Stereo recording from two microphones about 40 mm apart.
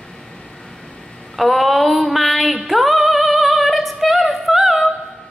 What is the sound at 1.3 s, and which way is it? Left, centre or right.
Female singing, centre.